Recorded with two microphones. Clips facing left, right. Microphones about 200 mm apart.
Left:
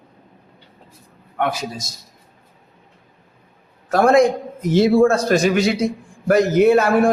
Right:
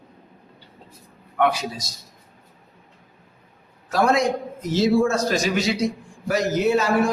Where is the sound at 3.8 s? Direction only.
50° left (ahead or behind).